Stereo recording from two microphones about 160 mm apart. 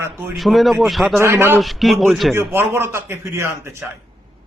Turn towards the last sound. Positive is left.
turn(degrees=-15)  # may be behind; listen again after turning